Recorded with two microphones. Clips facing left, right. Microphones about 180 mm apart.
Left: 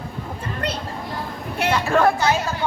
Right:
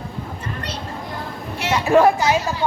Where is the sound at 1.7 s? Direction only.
15° right (ahead or behind).